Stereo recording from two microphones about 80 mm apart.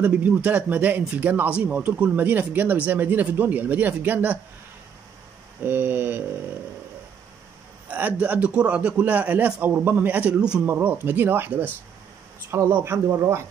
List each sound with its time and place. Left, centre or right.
0.0 s speech: centre
5.6 s speech: right
7.9 s a man's voice: centre
10.7 s speech: right